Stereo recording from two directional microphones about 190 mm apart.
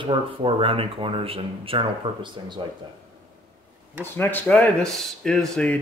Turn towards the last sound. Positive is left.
turn(degrees=5)  # may be behind; listen again after turning